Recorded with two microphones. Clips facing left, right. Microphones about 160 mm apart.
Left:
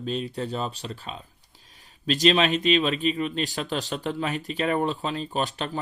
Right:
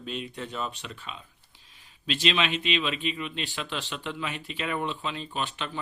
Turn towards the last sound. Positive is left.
turn(degrees=40)  # may be behind; listen again after turning